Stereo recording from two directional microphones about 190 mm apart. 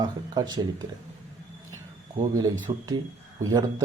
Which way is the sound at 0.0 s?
20° right (ahead or behind).